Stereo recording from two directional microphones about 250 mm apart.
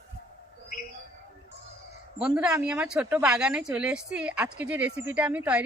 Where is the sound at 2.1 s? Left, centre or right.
Centre.